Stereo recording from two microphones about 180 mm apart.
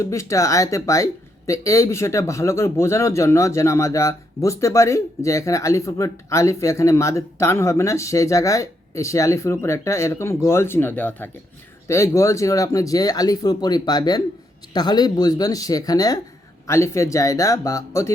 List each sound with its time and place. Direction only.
0.0 s speech: 15° left (ahead or behind)